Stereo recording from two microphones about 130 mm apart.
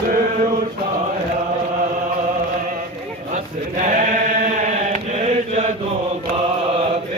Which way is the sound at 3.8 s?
80° right.